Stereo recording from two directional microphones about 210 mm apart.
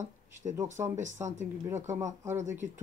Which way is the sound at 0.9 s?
35° right (ahead or behind).